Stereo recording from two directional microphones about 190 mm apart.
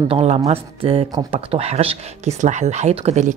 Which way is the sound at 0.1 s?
35° right (ahead or behind).